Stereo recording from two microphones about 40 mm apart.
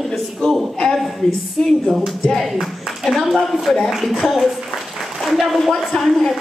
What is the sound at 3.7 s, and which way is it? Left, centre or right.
Speech, centre.